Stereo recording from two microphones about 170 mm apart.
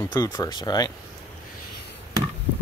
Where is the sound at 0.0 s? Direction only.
20° left (ahead or behind).